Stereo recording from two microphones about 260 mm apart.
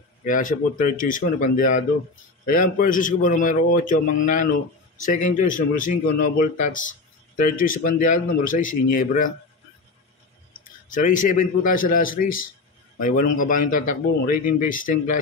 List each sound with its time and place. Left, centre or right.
0.2 s speech: left
10.9 s speech: left